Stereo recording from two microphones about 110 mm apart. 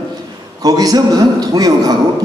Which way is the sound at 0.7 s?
35° right (ahead or behind).